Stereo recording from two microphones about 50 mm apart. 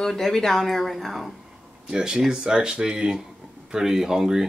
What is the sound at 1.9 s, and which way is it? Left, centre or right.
Speech, centre.